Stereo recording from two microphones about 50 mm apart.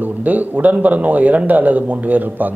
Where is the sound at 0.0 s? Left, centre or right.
Right.